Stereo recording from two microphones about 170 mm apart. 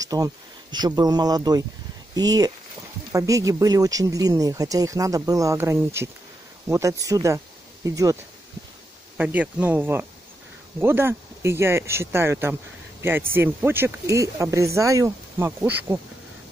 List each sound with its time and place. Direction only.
0.0 s speech: 20° right (ahead or behind)
9.1 s speech: 10° right (ahead or behind)